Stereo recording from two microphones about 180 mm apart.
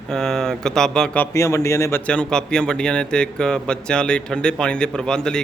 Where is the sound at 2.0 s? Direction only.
5° left (ahead or behind).